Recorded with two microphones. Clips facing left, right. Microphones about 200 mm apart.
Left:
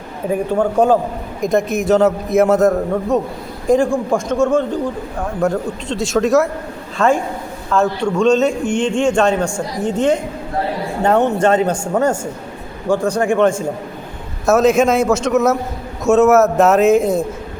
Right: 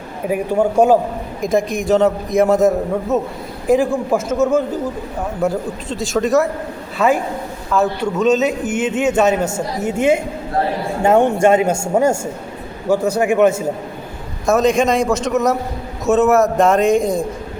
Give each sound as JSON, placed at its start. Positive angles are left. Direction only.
{"t": 0.3, "sound": "a man's voice", "side_deg": -10}
{"t": 9.5, "sound": "speech", "side_deg": -20}
{"t": 9.8, "sound": "a man's voice", "side_deg": -10}
{"t": 14.4, "sound": "a man's voice", "side_deg": 5}